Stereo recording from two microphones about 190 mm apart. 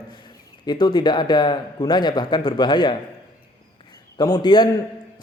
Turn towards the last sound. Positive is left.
turn(degrees=20)  # may be behind; listen again after turning